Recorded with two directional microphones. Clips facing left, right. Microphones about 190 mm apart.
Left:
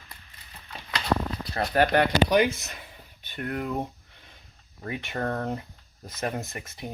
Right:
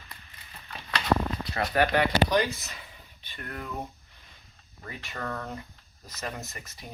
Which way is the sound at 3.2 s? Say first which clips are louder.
Left 8 dB; 50° left (ahead or behind).